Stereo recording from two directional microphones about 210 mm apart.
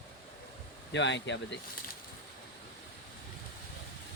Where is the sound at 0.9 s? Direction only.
60° left (ahead or behind).